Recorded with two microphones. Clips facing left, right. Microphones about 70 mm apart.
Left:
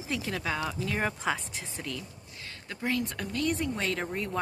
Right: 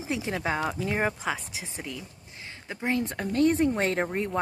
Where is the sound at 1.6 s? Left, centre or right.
Centre.